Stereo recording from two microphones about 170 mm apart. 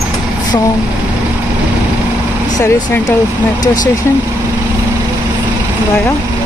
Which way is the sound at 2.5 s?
20° left (ahead or behind).